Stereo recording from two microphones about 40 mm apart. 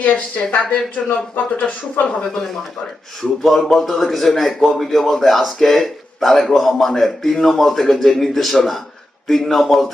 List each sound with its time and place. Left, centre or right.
0.0 s speech: left
1.0 s speech: centre
1.4 s speech: left
3.2 s speech: centre